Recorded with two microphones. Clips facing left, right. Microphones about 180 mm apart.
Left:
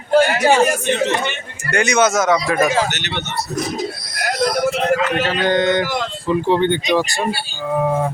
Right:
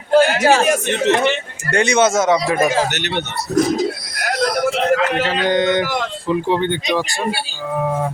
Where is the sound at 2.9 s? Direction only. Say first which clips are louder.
Right 4 dB; 55° right (ahead or behind).